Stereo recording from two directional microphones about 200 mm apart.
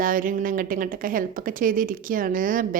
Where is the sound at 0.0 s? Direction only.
45° right (ahead or behind).